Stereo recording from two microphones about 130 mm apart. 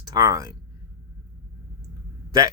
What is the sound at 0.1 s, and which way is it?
Speech, 30° right (ahead or behind).